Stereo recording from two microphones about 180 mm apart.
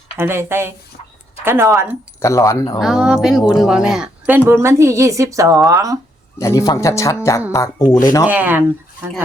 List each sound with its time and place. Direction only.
0.2 s speech: 10° right (ahead or behind)
2.2 s speech: 15° left (ahead or behind)
2.8 s speech: centre (ahead or behind); by 6.0 s 20° right (ahead or behind)
6.4 s speech: 20° left (ahead or behind)
8.3 s speech: 10° right (ahead or behind)